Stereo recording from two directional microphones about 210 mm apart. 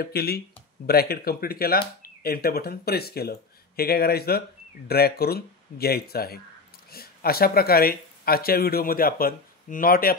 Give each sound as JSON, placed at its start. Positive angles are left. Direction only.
{"t": 0.0, "sound": "speech", "side_deg": 45}